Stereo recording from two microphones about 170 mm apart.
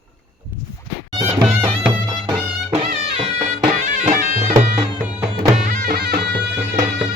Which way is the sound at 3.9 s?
50° right (ahead or behind).